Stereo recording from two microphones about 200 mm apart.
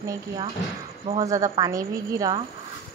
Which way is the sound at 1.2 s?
15° right (ahead or behind).